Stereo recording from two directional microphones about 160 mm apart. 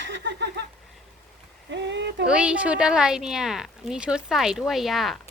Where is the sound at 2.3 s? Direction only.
5° right (ahead or behind).